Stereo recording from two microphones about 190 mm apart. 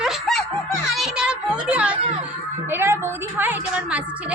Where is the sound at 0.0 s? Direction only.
Centre (ahead or behind).